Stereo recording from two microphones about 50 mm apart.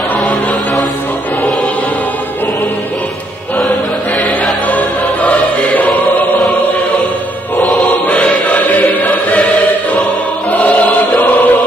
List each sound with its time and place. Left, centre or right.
0.1 s music: left
5.2 s music: left
8.1 s choir: left
10.5 s choir: left